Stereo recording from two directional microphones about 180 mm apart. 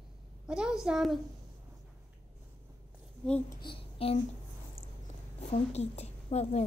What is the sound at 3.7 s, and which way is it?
Speech, 30° left (ahead or behind).